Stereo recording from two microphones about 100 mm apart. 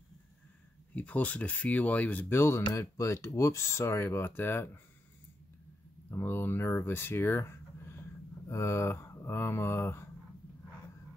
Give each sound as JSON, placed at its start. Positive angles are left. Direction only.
{"t": 0.9, "sound": "speech", "side_deg": 15}
{"t": 6.0, "sound": "speech", "side_deg": 25}